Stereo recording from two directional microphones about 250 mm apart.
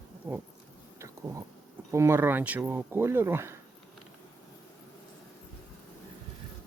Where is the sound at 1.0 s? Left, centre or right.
Centre.